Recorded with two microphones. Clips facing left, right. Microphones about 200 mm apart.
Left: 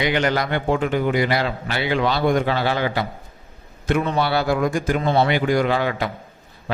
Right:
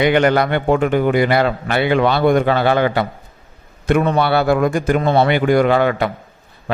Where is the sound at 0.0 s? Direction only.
55° right (ahead or behind).